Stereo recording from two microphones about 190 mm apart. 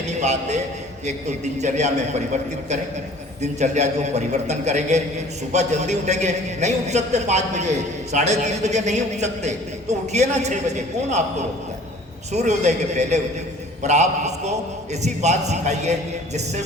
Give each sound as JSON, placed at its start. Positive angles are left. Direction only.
{"t": 0.2, "sound": "a man's voice", "side_deg": -35}
{"t": 1.6, "sound": "a man's voice", "side_deg": -35}
{"t": 3.4, "sound": "a man's voice", "side_deg": -35}
{"t": 12.3, "sound": "a man's voice", "side_deg": -35}